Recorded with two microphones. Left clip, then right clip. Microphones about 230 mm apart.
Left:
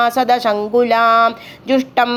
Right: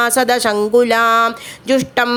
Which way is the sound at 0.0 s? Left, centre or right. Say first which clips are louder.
Even; right.